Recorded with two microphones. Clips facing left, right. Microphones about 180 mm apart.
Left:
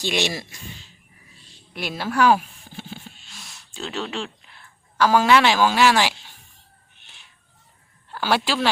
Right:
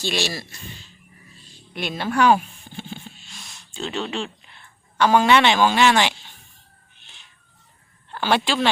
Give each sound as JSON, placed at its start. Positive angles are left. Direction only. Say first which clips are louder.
{"t": 0.0, "sound": "speech", "louder": "left 1 dB", "side_deg": 20}
{"t": 1.7, "sound": "a sound", "louder": "right 1 dB", "side_deg": 5}
{"t": 8.1, "sound": "speech", "louder": "right 1 dB", "side_deg": 5}